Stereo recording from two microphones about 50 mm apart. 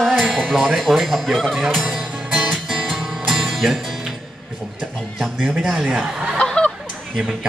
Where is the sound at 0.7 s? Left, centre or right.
Centre.